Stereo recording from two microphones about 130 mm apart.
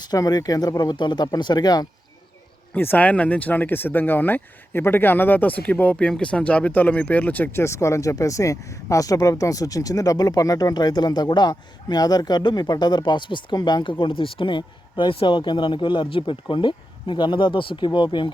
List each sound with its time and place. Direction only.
0.0 s speech: 30° left (ahead or behind)
2.7 s speech: 15° left (ahead or behind); by 18.3 s 40° left (ahead or behind)